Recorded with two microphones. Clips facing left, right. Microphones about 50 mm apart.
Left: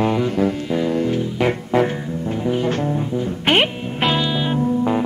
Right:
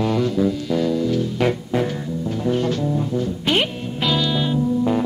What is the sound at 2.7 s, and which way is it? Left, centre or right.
Music, left.